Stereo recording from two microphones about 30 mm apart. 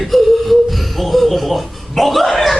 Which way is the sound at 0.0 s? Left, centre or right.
Centre.